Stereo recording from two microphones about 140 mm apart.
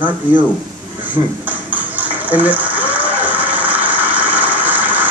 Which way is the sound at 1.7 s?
10° right (ahead or behind).